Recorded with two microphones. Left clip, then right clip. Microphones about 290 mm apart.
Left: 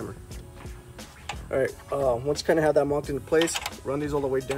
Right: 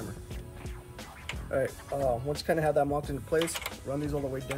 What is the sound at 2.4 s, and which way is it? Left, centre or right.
Speech, left.